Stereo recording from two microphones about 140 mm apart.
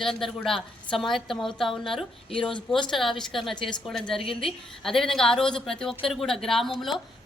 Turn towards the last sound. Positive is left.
turn(degrees=0)  # may be behind; listen again after turning